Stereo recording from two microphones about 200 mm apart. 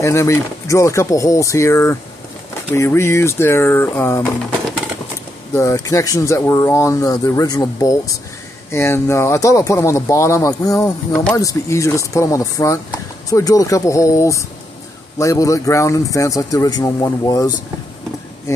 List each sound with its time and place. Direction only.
0.0 s speech: 15° left (ahead or behind)
5.5 s speech: 15° left (ahead or behind)